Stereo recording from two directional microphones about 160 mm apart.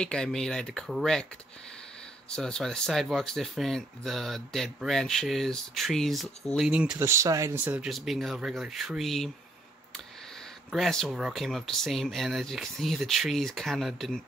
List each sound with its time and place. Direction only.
0.0 s speech: 5° left (ahead or behind)
2.2 s speech: 5° left (ahead or behind)
10.7 s speech: centre (ahead or behind)